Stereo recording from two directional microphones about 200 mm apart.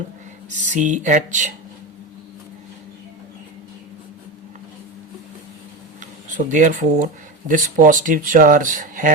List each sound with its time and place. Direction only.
0.6 s speech: 40° right (ahead or behind)
6.0 s a sound: 40° right (ahead or behind)
7.0 s speech: 40° right (ahead or behind)